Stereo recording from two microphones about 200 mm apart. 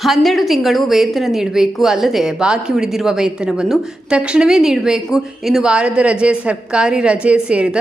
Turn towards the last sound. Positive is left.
turn(degrees=-5)  # may be behind; listen again after turning